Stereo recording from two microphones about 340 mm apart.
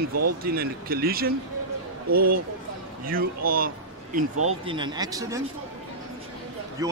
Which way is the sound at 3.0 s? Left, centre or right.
Right.